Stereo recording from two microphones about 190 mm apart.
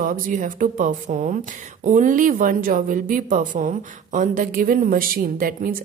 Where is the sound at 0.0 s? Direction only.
45° right (ahead or behind).